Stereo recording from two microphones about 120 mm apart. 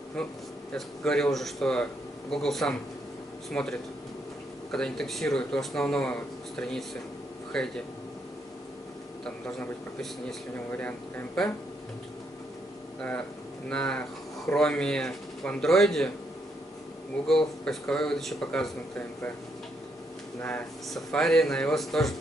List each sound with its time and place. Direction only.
0.7 s speech: 5° left (ahead or behind)
10.7 s speech: 15° left (ahead or behind)
13.7 s speech: 10° left (ahead or behind)
17.3 s speech: 5° left (ahead or behind)
20.3 s speech: 20° left (ahead or behind)
20.9 s speech: 5° left (ahead or behind)